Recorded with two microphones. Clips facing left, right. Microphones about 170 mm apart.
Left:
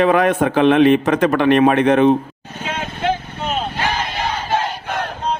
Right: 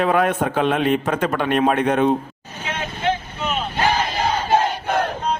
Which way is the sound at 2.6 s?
55° left (ahead or behind).